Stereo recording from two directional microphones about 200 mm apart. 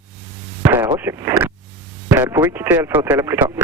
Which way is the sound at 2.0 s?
10° right (ahead or behind).